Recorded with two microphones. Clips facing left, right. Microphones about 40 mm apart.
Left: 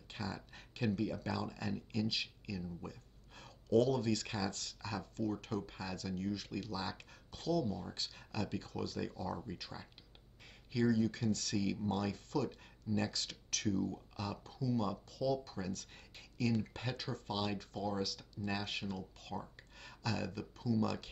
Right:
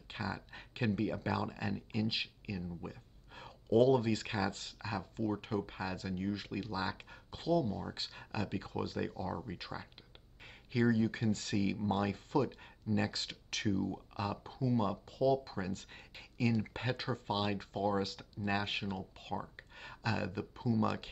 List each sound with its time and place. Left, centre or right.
0.1 s speech: right